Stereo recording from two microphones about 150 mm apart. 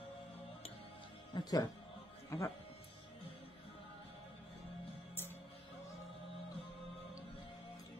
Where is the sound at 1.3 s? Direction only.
30° left (ahead or behind).